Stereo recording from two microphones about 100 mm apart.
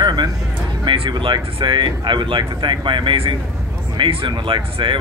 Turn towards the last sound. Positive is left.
turn(degrees=-55)  # may be behind; listen again after turning